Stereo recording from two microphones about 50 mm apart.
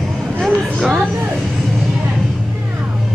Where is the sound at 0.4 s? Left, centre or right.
Centre.